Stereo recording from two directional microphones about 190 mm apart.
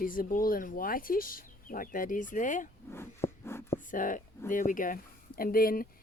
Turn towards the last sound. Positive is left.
turn(degrees=50)  # may be behind; listen again after turning